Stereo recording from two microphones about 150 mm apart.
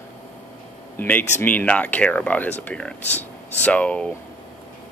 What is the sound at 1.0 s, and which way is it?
Speech, 10° left (ahead or behind).